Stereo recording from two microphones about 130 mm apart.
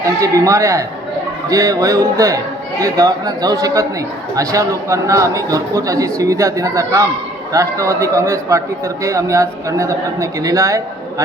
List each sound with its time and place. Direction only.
0.2 s a man's voice: 25° right (ahead or behind)